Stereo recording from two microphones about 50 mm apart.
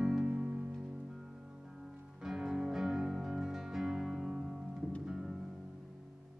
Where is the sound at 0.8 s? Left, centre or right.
Centre.